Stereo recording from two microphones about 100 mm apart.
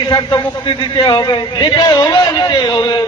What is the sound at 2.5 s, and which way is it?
Speech, 40° left (ahead or behind).